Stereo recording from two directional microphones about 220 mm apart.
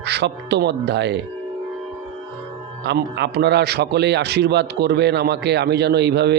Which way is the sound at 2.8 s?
50° right (ahead or behind).